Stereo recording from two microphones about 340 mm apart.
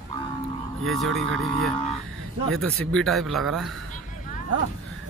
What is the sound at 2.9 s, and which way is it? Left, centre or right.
Speech, centre.